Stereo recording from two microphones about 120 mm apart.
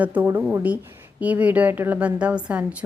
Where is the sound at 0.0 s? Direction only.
15° right (ahead or behind).